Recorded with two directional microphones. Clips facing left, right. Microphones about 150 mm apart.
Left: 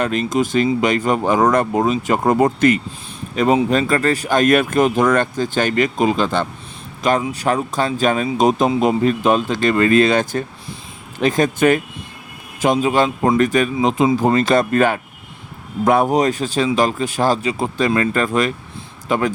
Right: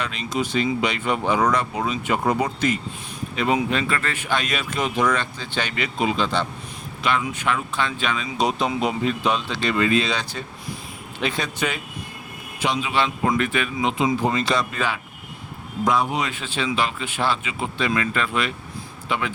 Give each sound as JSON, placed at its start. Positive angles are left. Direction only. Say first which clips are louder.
{"t": 0.0, "sound": "speech", "louder": "left 8 dB", "side_deg": 50}
{"t": 3.3, "sound": "speech", "louder": "left 7 dB", "side_deg": 40}
{"t": 7.0, "sound": "a man's voice", "louder": "left 6 dB", "side_deg": 40}